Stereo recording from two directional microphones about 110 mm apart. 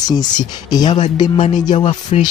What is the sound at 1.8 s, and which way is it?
Speech, 90° left.